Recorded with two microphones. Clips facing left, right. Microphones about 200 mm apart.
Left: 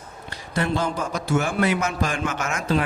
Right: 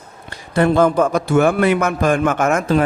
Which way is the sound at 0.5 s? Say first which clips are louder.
Right 11 dB; 55° right (ahead or behind).